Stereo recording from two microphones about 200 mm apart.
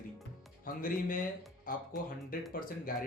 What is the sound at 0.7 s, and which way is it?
Speech, 45° left (ahead or behind).